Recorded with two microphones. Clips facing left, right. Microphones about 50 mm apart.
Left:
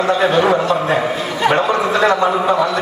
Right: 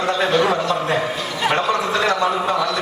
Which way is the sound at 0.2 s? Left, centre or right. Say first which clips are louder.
Left 2 dB; centre.